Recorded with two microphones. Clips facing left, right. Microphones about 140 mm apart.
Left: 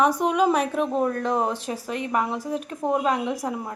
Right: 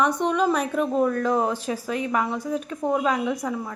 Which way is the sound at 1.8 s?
5° left (ahead or behind).